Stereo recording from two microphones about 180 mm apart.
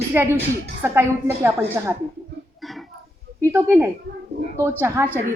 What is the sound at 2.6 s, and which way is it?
Throat clearing, centre (ahead or behind).